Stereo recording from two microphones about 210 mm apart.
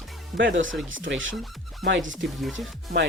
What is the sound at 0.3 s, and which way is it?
Speech, 60° right (ahead or behind).